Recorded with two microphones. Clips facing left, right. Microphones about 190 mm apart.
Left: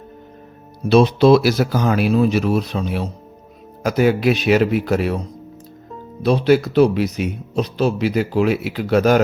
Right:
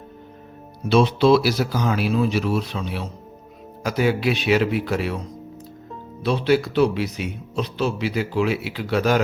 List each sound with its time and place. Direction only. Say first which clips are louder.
0.9 s speech: left 4 dB; 40° left (ahead or behind)
6.2 s speech: left 4 dB; 40° left (ahead or behind)